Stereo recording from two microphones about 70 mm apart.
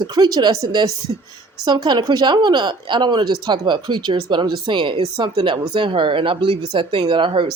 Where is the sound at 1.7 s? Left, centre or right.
Right.